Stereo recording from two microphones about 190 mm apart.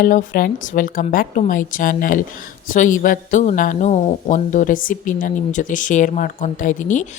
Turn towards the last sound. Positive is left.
turn(degrees=40)  # may be behind; listen again after turning